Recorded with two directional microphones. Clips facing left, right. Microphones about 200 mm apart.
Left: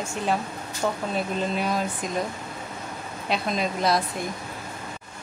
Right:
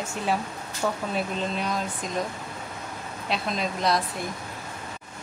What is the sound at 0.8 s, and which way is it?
Speech, 10° left (ahead or behind).